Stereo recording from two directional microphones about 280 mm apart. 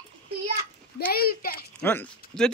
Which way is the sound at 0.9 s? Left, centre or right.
Left.